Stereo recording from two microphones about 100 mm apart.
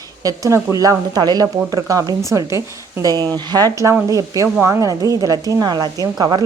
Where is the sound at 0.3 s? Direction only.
35° right (ahead or behind).